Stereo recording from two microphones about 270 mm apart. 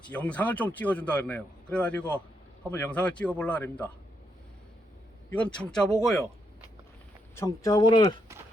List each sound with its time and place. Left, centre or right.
0.1 s speech: centre
5.3 s speech: centre
7.3 s speech: centre